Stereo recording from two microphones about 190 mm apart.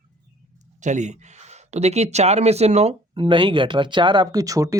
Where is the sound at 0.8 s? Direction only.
40° right (ahead or behind).